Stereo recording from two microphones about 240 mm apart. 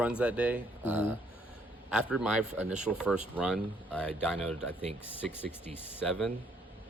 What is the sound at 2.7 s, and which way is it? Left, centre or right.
Speech, centre.